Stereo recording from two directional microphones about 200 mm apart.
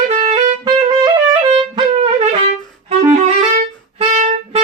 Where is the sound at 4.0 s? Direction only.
30° right (ahead or behind).